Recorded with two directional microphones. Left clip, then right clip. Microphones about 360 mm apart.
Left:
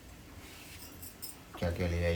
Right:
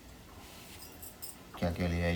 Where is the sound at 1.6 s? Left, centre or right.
Centre.